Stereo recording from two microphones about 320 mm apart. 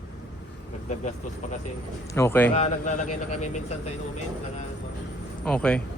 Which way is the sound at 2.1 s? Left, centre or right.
Centre.